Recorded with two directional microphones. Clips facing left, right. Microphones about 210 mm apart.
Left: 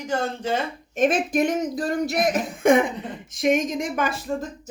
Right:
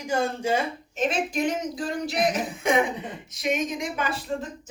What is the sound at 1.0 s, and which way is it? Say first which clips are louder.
Speech: left 5 dB; 50° left (ahead or behind).